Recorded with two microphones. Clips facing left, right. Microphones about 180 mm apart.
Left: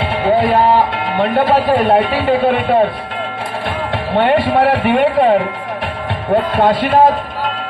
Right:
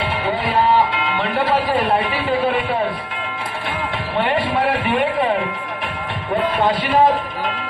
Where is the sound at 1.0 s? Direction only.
55° left (ahead or behind).